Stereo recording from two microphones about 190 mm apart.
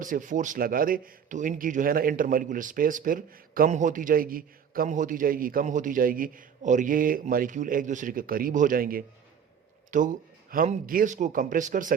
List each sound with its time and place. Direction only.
0.0 s speech: 45° right (ahead or behind)